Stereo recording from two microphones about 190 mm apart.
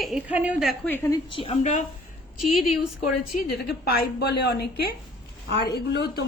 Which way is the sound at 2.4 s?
Centre (ahead or behind).